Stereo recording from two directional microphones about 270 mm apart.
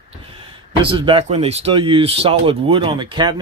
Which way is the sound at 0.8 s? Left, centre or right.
Centre.